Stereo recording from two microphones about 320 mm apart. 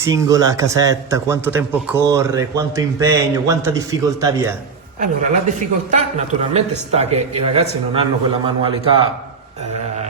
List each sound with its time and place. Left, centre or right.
0.0 s a man's voice: centre
4.9 s a man's voice: right